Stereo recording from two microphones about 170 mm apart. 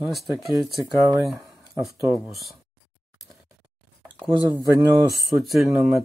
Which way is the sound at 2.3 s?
Centre (ahead or behind).